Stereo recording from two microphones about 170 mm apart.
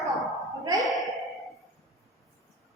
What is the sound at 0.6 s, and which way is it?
Ping, 20° right (ahead or behind).